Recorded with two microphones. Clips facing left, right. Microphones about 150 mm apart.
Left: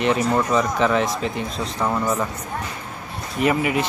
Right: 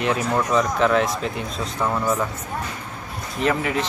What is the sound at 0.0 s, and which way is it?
Speech, centre (ahead or behind).